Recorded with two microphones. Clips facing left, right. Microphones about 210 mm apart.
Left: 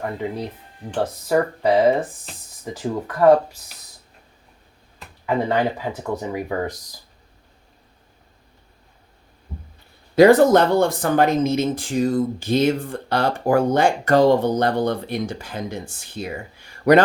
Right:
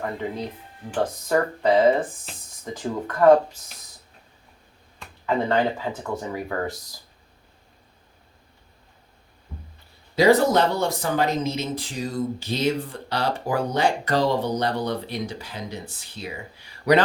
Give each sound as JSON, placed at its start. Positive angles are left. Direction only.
{"t": 0.9, "sound": "speech", "side_deg": 5}
{"t": 4.9, "sound": "speech", "side_deg": 10}
{"t": 10.2, "sound": "speech", "side_deg": 50}